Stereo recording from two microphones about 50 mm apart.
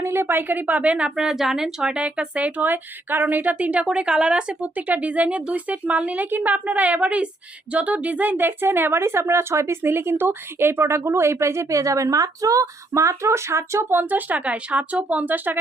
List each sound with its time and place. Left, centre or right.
0.0 s a sound: right
0.3 s speech: right
0.7 s speech: right
1.1 s a woman's voice: centre
1.8 s speech: right
3.8 s speech: centre; by 13.8 s right
13.9 s speech: right